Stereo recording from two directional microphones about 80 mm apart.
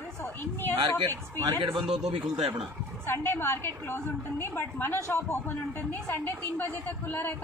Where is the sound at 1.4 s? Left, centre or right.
Right.